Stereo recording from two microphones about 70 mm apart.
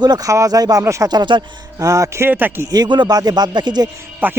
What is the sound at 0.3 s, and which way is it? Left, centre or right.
Speech, right.